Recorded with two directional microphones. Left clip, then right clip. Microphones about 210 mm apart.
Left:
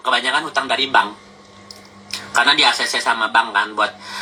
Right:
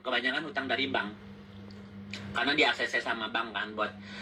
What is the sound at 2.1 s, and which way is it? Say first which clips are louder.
A man's voice: left 15 dB; 5° left (ahead or behind).